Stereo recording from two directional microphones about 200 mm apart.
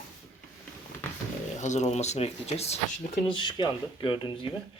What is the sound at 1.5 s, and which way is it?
Speech, 35° left (ahead or behind).